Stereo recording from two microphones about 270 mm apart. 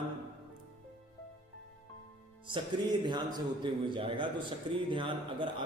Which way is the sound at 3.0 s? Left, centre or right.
Centre.